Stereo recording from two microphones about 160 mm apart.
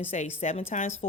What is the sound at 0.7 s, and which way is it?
Speech, 50° left (ahead or behind).